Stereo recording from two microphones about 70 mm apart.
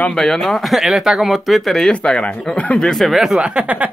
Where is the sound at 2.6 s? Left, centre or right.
Centre.